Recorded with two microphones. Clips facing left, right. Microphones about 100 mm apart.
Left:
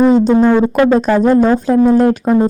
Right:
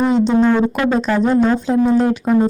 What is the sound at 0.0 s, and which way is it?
Speech, 45° left (ahead or behind).